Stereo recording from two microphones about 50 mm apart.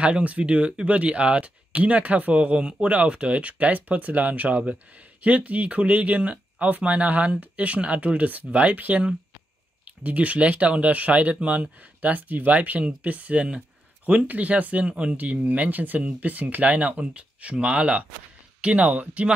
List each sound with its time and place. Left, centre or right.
0.0 s speech: right
10.0 s speech: right